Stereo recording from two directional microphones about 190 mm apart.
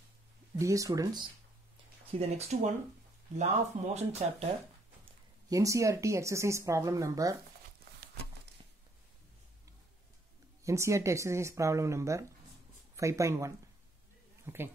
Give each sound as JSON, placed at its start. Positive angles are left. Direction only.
{"t": 0.6, "sound": "speech", "side_deg": -15}
{"t": 2.1, "sound": "speech", "side_deg": -35}
{"t": 5.5, "sound": "speech", "side_deg": -15}
{"t": 10.6, "sound": "speech", "side_deg": -15}